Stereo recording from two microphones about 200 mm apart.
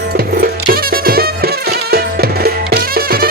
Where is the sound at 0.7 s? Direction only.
50° right (ahead or behind).